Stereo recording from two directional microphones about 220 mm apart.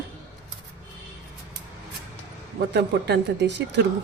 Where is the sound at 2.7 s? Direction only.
50° right (ahead or behind).